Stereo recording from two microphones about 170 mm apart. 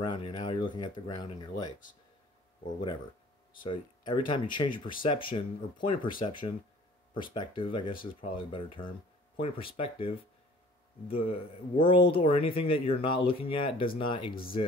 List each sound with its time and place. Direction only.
0.0 s speech: 25° left (ahead or behind)
7.9 s speech: 55° left (ahead or behind)
8.4 s speech: 30° left (ahead or behind)